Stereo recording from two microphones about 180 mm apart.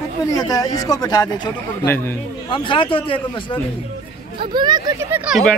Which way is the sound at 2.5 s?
30° left (ahead or behind).